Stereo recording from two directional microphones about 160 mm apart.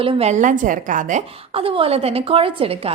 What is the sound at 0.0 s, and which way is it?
A woman's voice, 35° right (ahead or behind).